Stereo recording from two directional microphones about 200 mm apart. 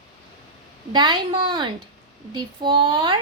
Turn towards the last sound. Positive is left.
turn(degrees=-25)  # may be behind; listen again after turning